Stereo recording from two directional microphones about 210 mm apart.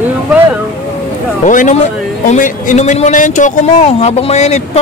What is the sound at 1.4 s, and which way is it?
Speech, 35° left (ahead or behind).